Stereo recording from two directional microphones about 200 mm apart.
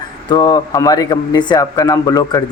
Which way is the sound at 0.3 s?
20° left (ahead or behind).